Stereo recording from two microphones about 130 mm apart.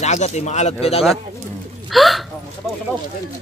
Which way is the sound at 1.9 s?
Centre (ahead or behind).